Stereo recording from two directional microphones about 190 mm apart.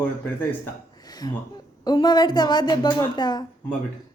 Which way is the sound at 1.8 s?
20° left (ahead or behind).